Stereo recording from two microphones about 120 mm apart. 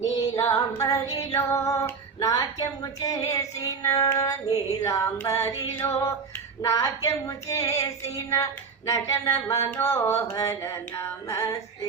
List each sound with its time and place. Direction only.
0.0 s female singing: 25° left (ahead or behind)
2.2 s a sound: 35° left (ahead or behind)
3.9 s music: 30° left (ahead or behind)
5.2 s female singing: 25° left (ahead or behind)